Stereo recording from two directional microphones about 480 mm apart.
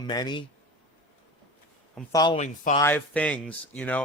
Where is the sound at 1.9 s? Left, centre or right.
Centre.